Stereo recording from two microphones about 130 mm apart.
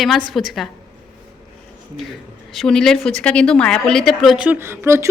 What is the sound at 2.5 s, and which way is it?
Speech, 5° left (ahead or behind).